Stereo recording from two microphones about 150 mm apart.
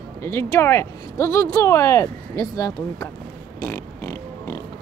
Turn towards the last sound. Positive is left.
turn(degrees=20)  # may be behind; listen again after turning